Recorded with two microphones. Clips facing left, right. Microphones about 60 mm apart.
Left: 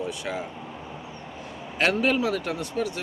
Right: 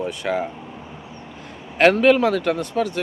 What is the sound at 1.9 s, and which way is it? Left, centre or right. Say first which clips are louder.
Speech: right 8 dB; right.